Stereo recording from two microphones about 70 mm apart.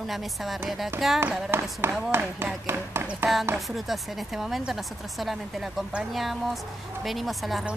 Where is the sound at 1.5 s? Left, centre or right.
Right.